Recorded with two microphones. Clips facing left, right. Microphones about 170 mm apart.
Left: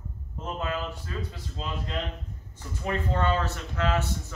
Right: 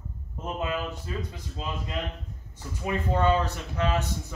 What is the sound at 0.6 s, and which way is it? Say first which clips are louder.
Speech: right 1 dB; 15° right (ahead or behind).